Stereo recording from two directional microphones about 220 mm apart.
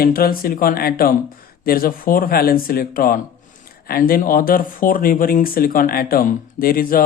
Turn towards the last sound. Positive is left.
turn(degrees=40)  # may be behind; listen again after turning